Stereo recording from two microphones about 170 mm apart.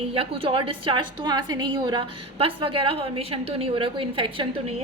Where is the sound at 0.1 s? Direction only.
35° right (ahead or behind).